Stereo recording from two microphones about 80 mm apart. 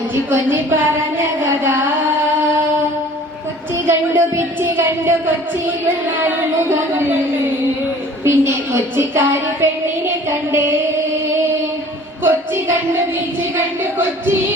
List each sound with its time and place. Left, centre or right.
0.3 s a woman's voice: right
1.2 s music: right
3.8 s a woman's voice: right
8.2 s a woman's voice: right
12.2 s music: right